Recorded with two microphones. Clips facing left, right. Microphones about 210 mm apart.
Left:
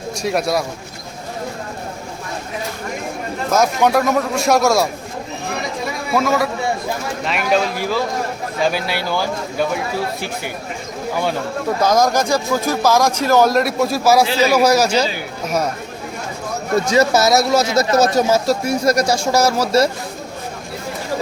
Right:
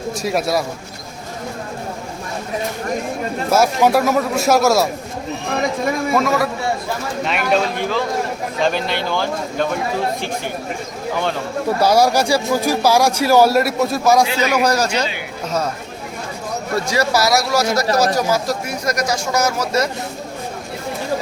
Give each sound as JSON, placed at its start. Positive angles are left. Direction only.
{"t": 0.2, "sound": "a man's voice", "side_deg": 0}
{"t": 3.5, "sound": "a man's voice", "side_deg": -5}
{"t": 6.1, "sound": "a man's voice", "side_deg": 0}
{"t": 11.8, "sound": "speech", "side_deg": -10}
{"t": 14.3, "sound": "a man's voice", "side_deg": 35}
{"t": 14.5, "sound": "speech", "side_deg": 10}
{"t": 14.8, "sound": "a man's voice", "side_deg": 35}
{"t": 15.4, "sound": "speech", "side_deg": 10}
{"t": 16.7, "sound": "speech", "side_deg": 20}